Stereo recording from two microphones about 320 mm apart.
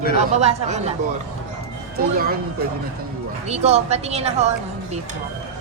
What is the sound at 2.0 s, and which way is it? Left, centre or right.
Speech, right.